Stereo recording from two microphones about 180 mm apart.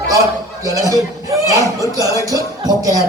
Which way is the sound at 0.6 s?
20° right (ahead or behind).